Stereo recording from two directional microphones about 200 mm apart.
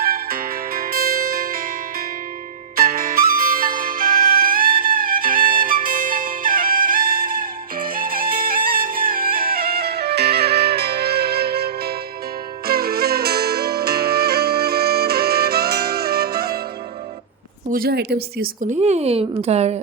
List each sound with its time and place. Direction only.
0.0 s music: 45° right (ahead or behind)
17.7 s speech: 50° right (ahead or behind); by 19.8 s 35° right (ahead or behind)